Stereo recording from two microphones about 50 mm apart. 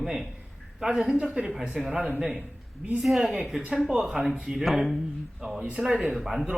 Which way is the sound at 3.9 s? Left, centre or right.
Centre.